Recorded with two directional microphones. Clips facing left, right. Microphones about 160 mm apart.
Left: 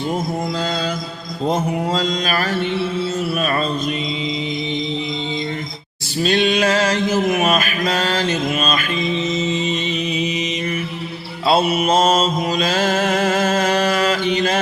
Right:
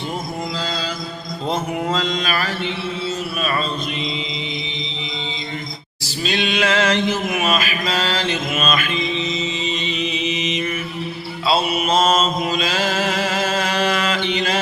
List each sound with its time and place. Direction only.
1.9 s mantra: 35° left (ahead or behind)
6.2 s mantra: 45° left (ahead or behind)
11.4 s mantra: 45° left (ahead or behind)